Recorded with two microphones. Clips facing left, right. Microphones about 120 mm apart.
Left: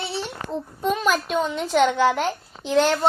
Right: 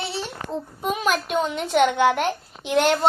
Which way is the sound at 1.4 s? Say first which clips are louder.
Right 1 dB; 60° right (ahead or behind).